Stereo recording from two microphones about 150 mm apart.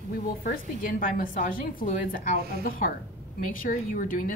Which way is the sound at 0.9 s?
70° left (ahead or behind).